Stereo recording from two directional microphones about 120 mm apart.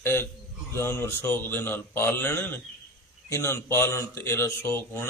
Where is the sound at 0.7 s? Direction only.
20° left (ahead or behind).